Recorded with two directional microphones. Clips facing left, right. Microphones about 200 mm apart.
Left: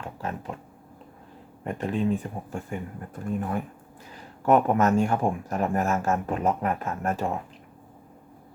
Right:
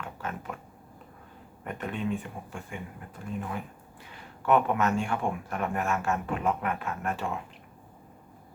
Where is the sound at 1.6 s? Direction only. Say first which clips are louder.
Left 6 dB; 30° left (ahead or behind).